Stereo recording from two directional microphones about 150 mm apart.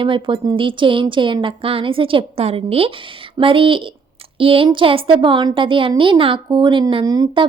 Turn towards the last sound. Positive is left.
turn(degrees=-25)  # may be behind; listen again after turning